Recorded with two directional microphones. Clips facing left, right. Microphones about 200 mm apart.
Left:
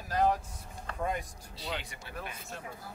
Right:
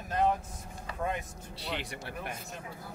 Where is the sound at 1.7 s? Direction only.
65° right (ahead or behind).